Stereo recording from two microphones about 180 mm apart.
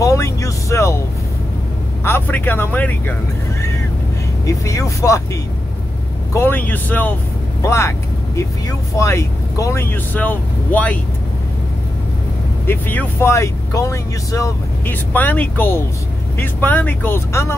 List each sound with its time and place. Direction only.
0.0 s vehicle: 15° left (ahead or behind)
2.0 s speech: 10° left (ahead or behind)
4.5 s speech: 15° left (ahead or behind)
8.9 s speech: 15° left (ahead or behind)
12.6 s speech: 10° left (ahead or behind)